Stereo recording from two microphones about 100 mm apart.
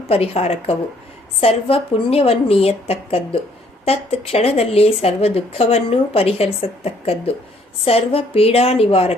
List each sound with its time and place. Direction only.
0.1 s a woman's voice: 90° left
1.4 s a woman's voice: 75° left (ahead or behind)
3.8 s a woman's voice: 90° left